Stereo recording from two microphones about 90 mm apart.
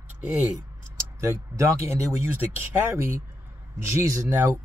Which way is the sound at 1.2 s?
35° right (ahead or behind).